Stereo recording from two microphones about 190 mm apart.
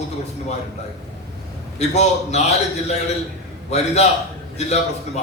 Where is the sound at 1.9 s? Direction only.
35° left (ahead or behind).